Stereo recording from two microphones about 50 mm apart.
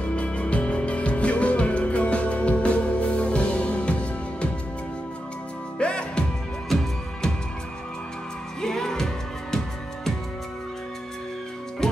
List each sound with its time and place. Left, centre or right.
0.0 s music: left
5.8 s music: centre
6.7 s music: centre
8.5 s music: centre
11.8 s music: centre